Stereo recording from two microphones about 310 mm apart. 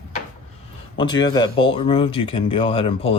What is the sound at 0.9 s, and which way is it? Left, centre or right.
A man's voice, centre.